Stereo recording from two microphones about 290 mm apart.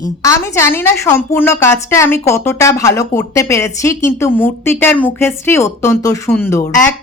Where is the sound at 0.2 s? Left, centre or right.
Centre.